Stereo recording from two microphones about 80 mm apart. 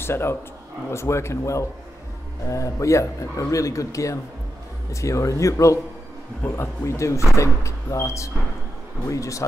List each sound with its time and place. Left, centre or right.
0.0 s speech: left